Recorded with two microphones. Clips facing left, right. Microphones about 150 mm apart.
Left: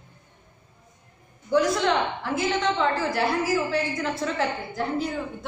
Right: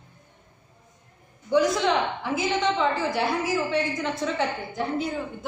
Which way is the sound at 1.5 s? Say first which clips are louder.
Even; centre (ahead or behind).